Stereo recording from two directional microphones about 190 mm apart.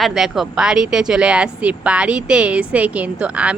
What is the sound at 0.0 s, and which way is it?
A woman's voice, centre (ahead or behind).